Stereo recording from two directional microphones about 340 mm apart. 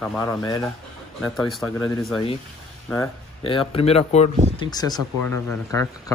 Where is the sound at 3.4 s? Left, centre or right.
Centre.